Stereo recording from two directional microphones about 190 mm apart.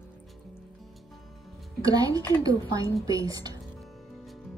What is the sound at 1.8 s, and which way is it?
Speech, 20° right (ahead or behind).